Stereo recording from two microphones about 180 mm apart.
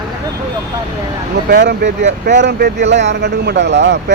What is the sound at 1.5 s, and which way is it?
Speech, 70° right (ahead or behind).